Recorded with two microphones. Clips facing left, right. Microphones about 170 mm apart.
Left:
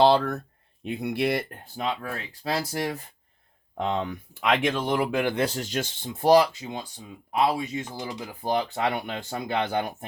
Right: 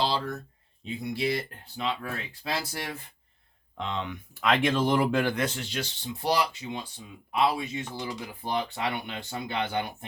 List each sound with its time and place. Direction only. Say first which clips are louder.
0.0 s speech: left 9 dB; 60° left (ahead or behind); by 4.2 s 40° left (ahead or behind)
4.6 s speech: right 1 dB; centre (ahead or behind)
5.2 s speech: left 3 dB; 30° left (ahead or behind); by 10.1 s 45° left (ahead or behind)